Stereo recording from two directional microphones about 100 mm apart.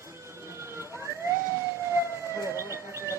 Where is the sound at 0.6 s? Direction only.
25° right (ahead or behind).